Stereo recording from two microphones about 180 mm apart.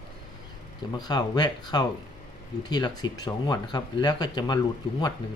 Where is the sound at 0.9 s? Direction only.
20° left (ahead or behind).